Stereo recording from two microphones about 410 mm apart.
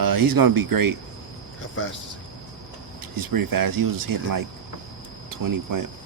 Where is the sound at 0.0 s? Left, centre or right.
Right.